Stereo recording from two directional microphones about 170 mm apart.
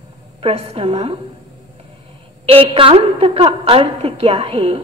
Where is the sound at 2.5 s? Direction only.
35° right (ahead or behind).